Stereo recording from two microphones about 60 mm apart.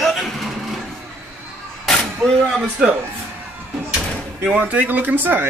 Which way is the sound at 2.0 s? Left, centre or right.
Centre.